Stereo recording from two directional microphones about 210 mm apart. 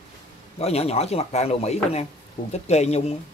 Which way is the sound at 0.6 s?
30° left (ahead or behind).